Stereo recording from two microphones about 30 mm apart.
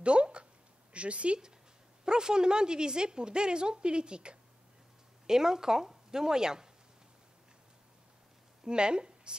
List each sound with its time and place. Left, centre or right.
0.0 s a sound: right
0.9 s speech: right
2.0 s a woman's voice: right
5.2 s speech: centre
8.6 s speech: right